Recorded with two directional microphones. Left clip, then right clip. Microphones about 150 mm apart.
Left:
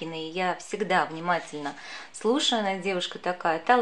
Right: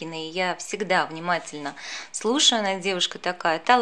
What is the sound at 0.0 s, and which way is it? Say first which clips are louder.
A woman's voice: right 2 dB; 30° right (ahead or behind).